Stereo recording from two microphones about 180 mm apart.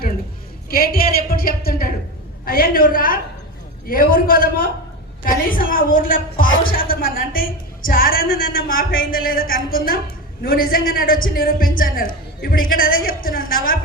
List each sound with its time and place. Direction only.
0.7 s a woman's voice: 55° left (ahead or behind)